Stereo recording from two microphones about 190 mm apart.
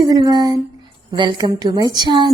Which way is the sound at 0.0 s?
20° right (ahead or behind).